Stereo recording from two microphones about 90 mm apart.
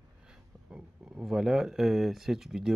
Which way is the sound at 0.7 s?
15° right (ahead or behind).